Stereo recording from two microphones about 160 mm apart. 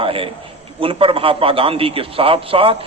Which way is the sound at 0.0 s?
35° right (ahead or behind).